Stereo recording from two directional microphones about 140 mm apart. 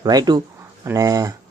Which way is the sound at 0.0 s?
30° right (ahead or behind).